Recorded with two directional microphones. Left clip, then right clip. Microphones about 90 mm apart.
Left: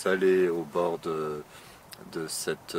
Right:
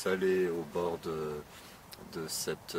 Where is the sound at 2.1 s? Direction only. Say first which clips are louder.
Left 5 dB; 40° left (ahead or behind).